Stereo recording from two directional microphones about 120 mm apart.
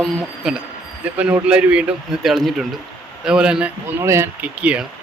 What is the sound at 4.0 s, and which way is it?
Speech, 25° right (ahead or behind).